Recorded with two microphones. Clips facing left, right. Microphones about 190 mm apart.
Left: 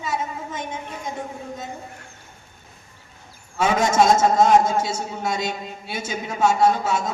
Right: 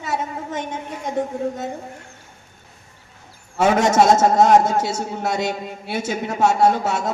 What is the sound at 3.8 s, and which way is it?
A man's voice, 65° right (ahead or behind).